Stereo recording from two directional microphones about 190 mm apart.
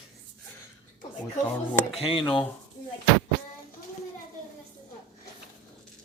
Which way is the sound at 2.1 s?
25° left (ahead or behind).